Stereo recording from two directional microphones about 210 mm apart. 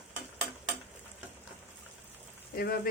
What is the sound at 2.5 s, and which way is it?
Speech, 45° left (ahead or behind).